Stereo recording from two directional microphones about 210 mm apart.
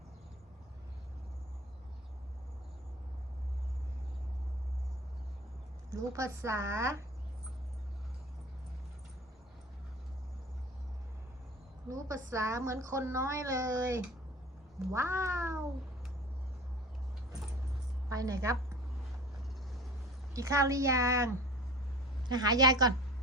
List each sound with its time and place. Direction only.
5.9 s a woman's voice: 15° right (ahead or behind)
11.9 s a woman's voice: 15° right (ahead or behind)
18.1 s a woman's voice: 15° right (ahead or behind)
20.3 s a woman's voice: 15° right (ahead or behind)